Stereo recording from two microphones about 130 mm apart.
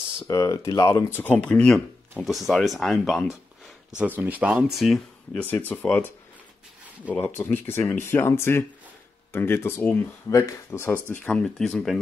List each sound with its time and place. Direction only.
0.3 s speech: 25° left (ahead or behind); by 3.3 s centre (ahead or behind)
4.0 s speech: 15° right (ahead or behind)
5.3 s speech: 10° left (ahead or behind)
7.2 s speech: 15° left (ahead or behind)